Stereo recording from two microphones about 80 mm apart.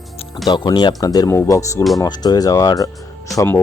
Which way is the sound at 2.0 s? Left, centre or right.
Left.